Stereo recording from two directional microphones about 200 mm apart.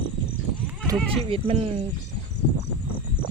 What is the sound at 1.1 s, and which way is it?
Speech, 30° right (ahead or behind).